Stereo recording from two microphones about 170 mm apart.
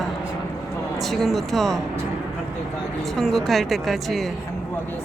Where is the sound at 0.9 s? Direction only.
Centre (ahead or behind).